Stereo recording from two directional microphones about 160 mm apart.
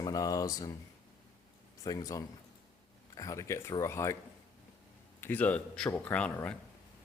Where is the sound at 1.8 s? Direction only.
20° left (ahead or behind).